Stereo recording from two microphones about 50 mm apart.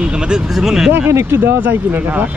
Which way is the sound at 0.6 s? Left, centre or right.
Centre.